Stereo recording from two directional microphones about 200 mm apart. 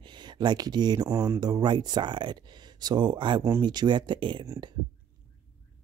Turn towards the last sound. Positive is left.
turn(degrees=-20)  # may be behind; listen again after turning